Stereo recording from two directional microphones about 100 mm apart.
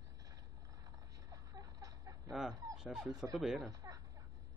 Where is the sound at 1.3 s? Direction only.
35° right (ahead or behind).